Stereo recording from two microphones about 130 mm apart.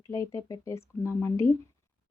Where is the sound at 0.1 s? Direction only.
25° left (ahead or behind).